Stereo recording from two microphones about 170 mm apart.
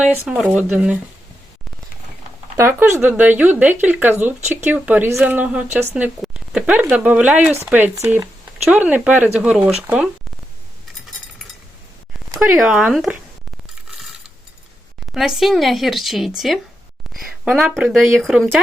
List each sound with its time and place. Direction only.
0.0 s speech: 10° right (ahead or behind)
2.6 s speech: 15° right (ahead or behind)
12.5 s speech: 5° right (ahead or behind)
15.1 s speech: centre (ahead or behind)